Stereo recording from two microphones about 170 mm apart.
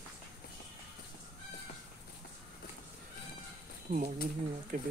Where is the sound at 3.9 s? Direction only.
50° right (ahead or behind).